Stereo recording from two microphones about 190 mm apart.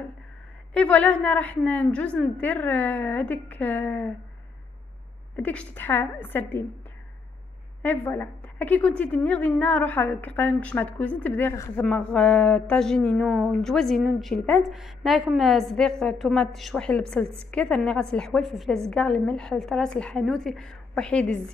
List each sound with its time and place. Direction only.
0.7 s a woman's voice: 5° left (ahead or behind)
5.3 s a woman's voice: 5° left (ahead or behind)
7.8 s a woman's voice: 10° left (ahead or behind)